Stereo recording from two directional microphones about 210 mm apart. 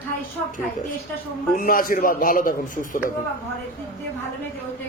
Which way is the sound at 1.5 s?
40° left (ahead or behind).